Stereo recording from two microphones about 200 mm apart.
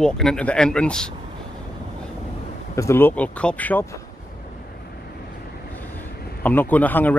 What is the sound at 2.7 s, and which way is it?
Speech, 15° left (ahead or behind).